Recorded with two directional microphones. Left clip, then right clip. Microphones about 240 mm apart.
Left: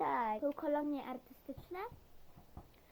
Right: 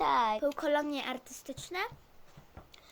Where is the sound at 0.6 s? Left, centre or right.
Right.